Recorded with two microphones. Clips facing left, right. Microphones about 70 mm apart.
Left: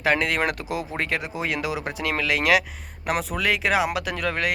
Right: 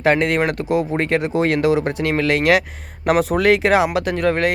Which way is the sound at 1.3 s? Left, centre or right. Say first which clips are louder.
Right 11 dB; right.